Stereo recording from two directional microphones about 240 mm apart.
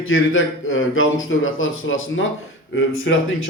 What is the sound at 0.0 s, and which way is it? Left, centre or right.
Speech, left.